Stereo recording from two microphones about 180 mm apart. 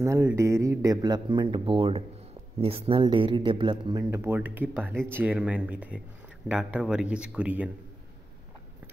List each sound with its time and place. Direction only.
0.0 s speech: 15° right (ahead or behind)